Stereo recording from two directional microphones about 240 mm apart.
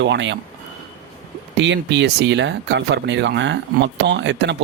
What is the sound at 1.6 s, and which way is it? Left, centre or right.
Speech, right.